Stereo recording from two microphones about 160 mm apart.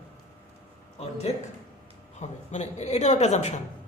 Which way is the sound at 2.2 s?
45° left (ahead or behind).